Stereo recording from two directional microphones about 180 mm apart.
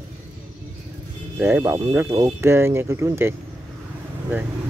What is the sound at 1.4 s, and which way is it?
Speech, 10° right (ahead or behind).